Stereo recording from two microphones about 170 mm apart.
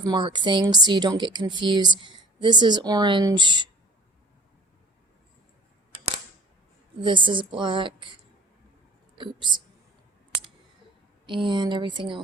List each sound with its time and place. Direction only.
0.0 s speech: 25° right (ahead or behind)
7.0 s speech: 30° right (ahead or behind)
9.1 s speech: 30° right (ahead or behind)
11.3 s speech: 30° right (ahead or behind)